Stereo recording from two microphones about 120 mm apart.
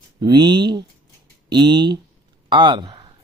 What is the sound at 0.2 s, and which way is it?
Speech, 35° right (ahead or behind).